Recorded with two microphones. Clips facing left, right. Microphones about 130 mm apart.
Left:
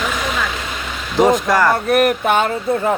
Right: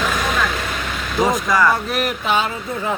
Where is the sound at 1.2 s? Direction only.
65° left (ahead or behind).